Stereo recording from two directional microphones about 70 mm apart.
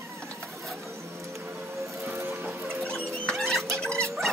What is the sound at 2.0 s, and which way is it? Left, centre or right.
Printer, right.